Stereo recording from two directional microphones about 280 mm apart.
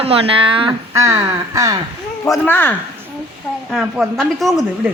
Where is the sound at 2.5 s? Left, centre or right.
Centre.